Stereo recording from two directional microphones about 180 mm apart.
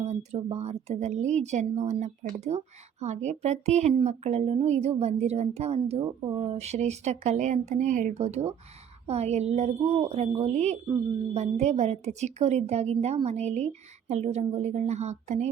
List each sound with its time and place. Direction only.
0.0 s speech: 40° right (ahead or behind)